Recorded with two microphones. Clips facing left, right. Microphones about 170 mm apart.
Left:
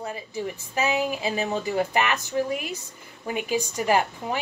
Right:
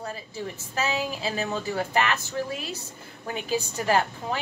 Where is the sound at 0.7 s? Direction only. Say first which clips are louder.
Left 3 dB; 15° left (ahead or behind).